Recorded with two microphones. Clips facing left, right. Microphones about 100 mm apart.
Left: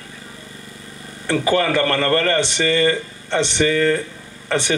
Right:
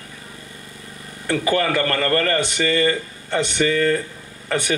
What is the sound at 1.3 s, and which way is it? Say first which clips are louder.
Speech: left 2 dB; 30° left (ahead or behind).